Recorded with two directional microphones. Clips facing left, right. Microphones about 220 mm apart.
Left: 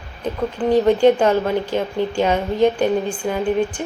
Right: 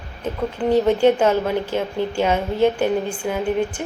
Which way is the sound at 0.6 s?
10° right (ahead or behind).